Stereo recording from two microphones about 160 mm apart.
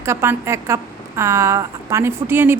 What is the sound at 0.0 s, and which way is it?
A woman's voice, 15° right (ahead or behind).